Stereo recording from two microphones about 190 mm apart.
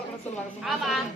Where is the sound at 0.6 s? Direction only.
Centre (ahead or behind).